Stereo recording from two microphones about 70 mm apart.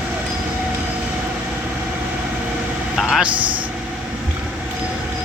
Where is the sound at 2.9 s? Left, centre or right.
Centre.